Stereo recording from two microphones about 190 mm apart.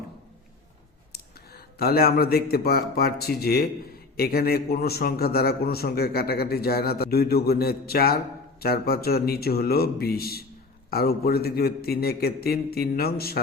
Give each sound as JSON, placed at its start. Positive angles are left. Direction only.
{"t": 1.1, "sound": "a man's voice", "side_deg": 55}